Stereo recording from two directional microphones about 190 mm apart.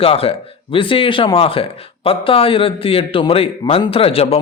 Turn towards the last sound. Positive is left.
turn(degrees=30)  # may be behind; listen again after turning